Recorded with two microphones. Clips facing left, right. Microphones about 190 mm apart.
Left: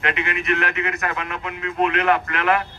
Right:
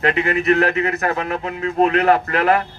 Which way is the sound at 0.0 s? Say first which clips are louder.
Right 7 dB; 35° right (ahead or behind).